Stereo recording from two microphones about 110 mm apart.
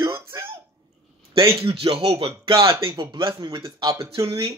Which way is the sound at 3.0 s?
45° right (ahead or behind).